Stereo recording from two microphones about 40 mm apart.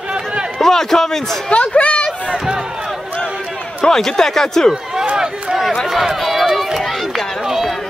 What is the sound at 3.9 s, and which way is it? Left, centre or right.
Speech, centre.